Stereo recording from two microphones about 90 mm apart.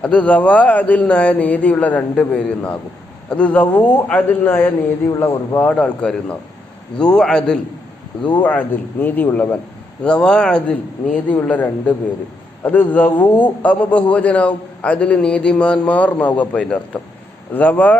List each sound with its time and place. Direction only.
0.0 s a man's voice: 15° left (ahead or behind)
5.5 s a man's voice: 15° left (ahead or behind)